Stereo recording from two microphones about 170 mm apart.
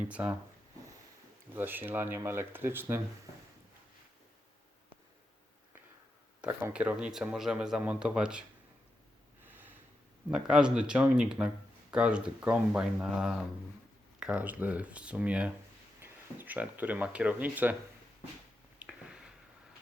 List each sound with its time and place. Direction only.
0.0 s speech: 10° right (ahead or behind)
1.5 s speech: 10° right (ahead or behind)
6.4 s speech: 10° right (ahead or behind)
9.4 s snort: 10° right (ahead or behind)
10.3 s speech: 5° right (ahead or behind)
18.8 s a sound: 5° right (ahead or behind)